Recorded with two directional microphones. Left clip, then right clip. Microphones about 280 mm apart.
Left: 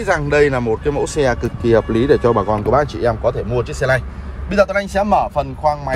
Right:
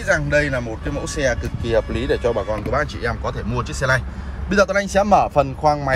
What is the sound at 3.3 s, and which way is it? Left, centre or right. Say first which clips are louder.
Speech: left 6 dB; centre.